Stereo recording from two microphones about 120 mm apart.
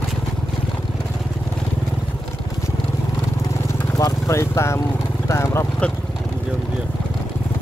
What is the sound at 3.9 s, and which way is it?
Vehicle, 30° left (ahead or behind).